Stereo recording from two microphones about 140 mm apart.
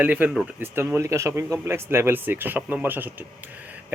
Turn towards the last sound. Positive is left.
turn(degrees=-15)  # may be behind; listen again after turning